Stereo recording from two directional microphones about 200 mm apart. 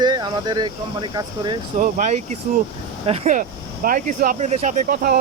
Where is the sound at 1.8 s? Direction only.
40° right (ahead or behind).